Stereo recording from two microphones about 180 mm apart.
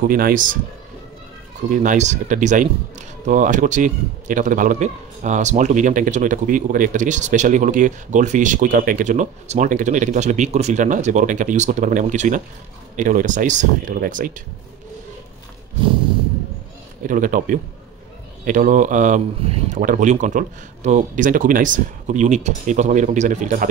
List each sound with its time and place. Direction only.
0.1 s a man's voice: 50° right (ahead or behind)
1.7 s a man's voice: 45° right (ahead or behind)
17.0 s a man's voice: 45° right (ahead or behind)